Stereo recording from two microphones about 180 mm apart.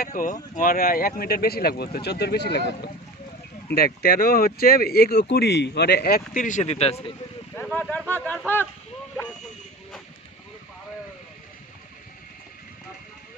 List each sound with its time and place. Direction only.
0.0 s speech: 50° left (ahead or behind); by 7.1 s 35° left (ahead or behind)
7.5 s a sound: 10° left (ahead or behind)
8.3 s speech: 10° left (ahead or behind)